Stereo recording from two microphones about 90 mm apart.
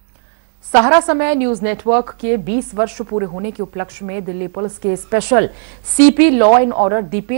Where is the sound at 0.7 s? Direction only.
Centre (ahead or behind).